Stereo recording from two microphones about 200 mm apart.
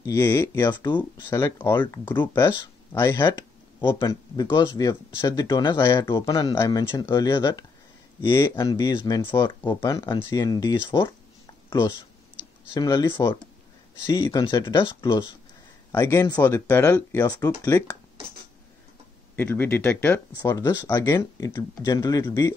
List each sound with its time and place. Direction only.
0.0 s speech: 10° left (ahead or behind)
15.9 s speech: 15° left (ahead or behind)
19.3 s speech: 10° left (ahead or behind)
20.3 s speech: 20° left (ahead or behind)